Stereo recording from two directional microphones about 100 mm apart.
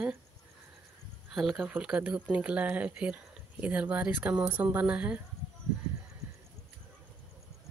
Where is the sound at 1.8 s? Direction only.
15° right (ahead or behind).